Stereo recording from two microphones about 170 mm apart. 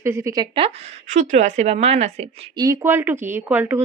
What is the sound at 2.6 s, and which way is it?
A woman's voice, 15° right (ahead or behind).